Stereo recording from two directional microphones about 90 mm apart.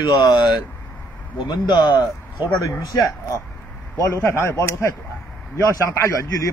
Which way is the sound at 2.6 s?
35° left (ahead or behind).